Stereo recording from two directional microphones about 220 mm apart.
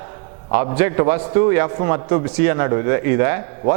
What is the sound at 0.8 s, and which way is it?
A man's voice, 15° right (ahead or behind).